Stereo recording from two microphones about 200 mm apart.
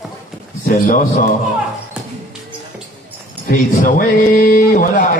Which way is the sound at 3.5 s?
45° left (ahead or behind).